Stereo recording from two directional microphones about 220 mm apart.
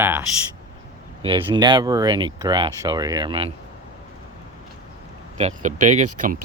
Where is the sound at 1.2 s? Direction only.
25° right (ahead or behind).